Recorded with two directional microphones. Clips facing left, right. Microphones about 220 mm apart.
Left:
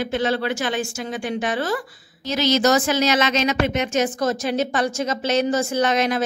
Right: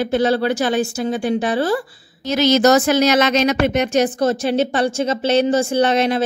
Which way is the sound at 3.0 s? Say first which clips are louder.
Right 5 dB; 65° right (ahead or behind).